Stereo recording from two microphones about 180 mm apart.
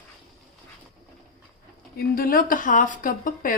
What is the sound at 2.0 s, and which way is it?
Speech, 55° left (ahead or behind).